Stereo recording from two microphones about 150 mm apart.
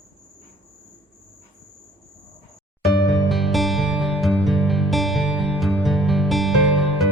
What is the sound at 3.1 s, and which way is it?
Music, centre (ahead or behind).